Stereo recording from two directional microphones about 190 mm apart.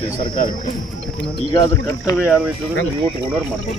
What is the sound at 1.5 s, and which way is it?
Speech, 20° left (ahead or behind).